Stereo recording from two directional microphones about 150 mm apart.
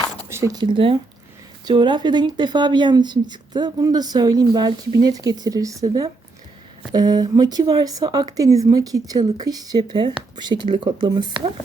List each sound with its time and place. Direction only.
0.3 s speech: 20° right (ahead or behind)